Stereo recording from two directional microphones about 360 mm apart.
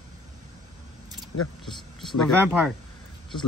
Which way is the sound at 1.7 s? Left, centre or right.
Centre.